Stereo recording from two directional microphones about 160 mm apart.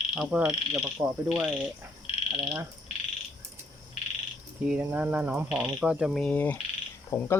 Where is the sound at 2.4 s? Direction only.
5° right (ahead or behind).